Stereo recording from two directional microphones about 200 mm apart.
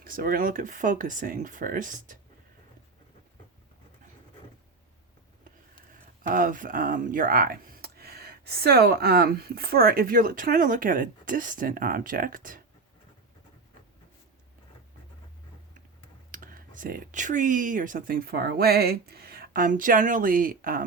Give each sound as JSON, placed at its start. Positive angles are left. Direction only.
{"t": 0.0, "sound": "speech", "side_deg": -45}
{"t": 6.2, "sound": "speech", "side_deg": -40}
{"t": 16.3, "sound": "speech", "side_deg": -45}